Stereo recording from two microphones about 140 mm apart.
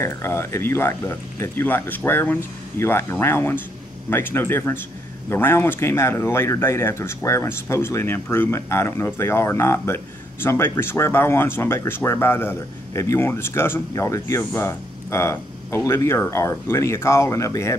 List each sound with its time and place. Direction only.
0.0 s speech: 20° left (ahead or behind)